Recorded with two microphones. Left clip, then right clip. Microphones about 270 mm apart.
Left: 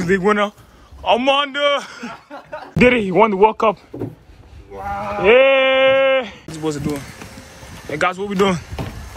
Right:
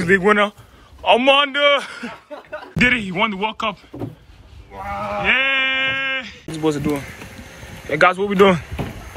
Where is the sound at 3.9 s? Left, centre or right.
Centre.